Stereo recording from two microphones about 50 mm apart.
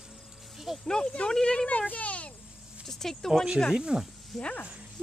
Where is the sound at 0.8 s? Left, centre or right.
Centre.